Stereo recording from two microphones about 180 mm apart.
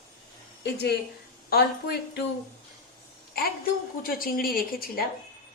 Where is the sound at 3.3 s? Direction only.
55° left (ahead or behind).